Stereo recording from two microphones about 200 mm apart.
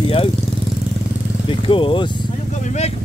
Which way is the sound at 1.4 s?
25° left (ahead or behind).